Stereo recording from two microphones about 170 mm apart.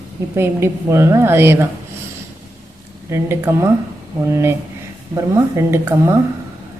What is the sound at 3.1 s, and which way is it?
A woman's voice, 15° right (ahead or behind).